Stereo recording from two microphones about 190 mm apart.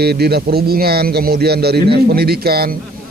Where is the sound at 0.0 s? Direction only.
55° right (ahead or behind).